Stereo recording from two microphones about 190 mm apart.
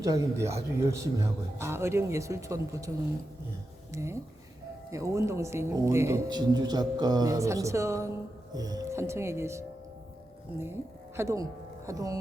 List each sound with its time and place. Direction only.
0.0 s speech: 15° right (ahead or behind)
3.9 s speech: 15° right (ahead or behind)
11.2 s speech: 15° right (ahead or behind)